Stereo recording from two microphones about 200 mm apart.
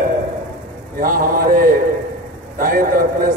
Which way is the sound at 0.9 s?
45° right (ahead or behind).